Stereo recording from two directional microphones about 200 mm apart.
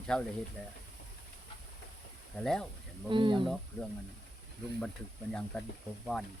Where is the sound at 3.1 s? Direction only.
25° right (ahead or behind).